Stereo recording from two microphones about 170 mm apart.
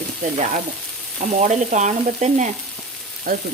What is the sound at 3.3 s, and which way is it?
Speech, 60° right (ahead or behind).